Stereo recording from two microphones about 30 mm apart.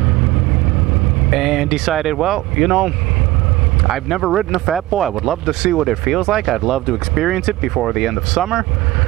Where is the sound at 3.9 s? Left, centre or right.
Centre.